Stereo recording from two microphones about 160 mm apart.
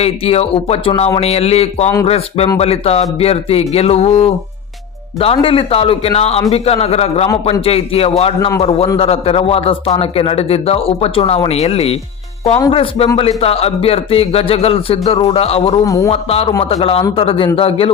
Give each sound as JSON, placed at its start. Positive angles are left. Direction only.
{"t": 0.0, "sound": "a man's voice", "side_deg": 40}
{"t": 15.8, "sound": "speech", "side_deg": 20}
{"t": 16.0, "sound": "a man's voice", "side_deg": 35}